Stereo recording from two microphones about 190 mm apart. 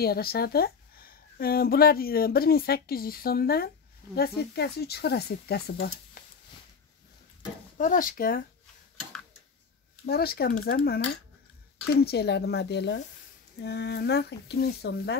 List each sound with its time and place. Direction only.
0.0 s speech: 55° left (ahead or behind)
7.7 s speech: 45° left (ahead or behind)
10.0 s speech: 55° left (ahead or behind)